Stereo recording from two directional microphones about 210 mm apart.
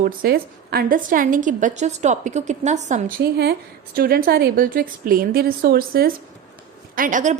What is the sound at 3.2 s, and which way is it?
A woman's voice, 50° right (ahead or behind).